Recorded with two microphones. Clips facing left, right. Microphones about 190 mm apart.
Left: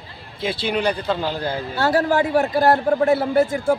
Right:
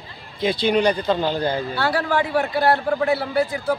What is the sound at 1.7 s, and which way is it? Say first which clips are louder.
A man's voice: left 3 dB; 40° left (ahead or behind).